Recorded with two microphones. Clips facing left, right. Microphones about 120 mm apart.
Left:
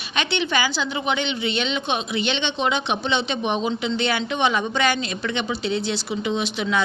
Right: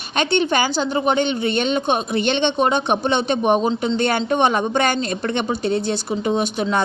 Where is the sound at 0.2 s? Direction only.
45° right (ahead or behind).